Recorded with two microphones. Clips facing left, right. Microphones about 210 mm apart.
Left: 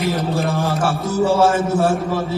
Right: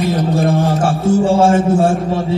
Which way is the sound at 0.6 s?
30° right (ahead or behind).